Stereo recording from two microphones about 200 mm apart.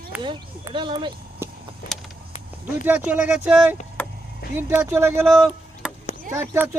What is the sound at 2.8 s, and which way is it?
Speech, 5° right (ahead or behind).